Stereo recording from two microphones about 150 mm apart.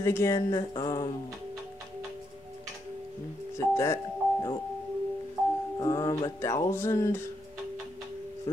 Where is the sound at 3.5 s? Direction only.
20° left (ahead or behind).